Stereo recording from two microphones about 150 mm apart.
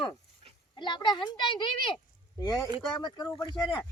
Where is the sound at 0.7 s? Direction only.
30° left (ahead or behind).